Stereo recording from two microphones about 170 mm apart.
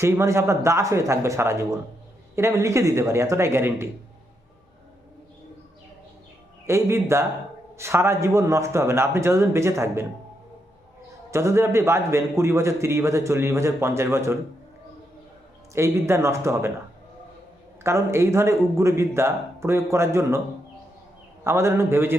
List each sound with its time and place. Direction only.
0.0 s a man's voice: 15° right (ahead or behind)
6.7 s a man's voice: 15° right (ahead or behind)
11.3 s a man's voice: 15° right (ahead or behind)
15.7 s a man's voice: 15° right (ahead or behind)
17.8 s a man's voice: 15° right (ahead or behind)
21.4 s a man's voice: 15° right (ahead or behind)